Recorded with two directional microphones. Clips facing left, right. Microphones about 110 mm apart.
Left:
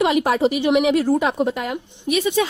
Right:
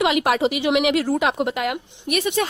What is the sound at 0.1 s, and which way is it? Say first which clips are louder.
A woman's voice: left 2 dB; 90° right.